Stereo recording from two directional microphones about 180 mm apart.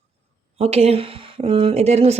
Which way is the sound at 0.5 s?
35° right (ahead or behind).